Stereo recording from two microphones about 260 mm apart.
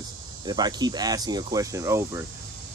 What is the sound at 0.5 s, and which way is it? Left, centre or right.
Speech, centre.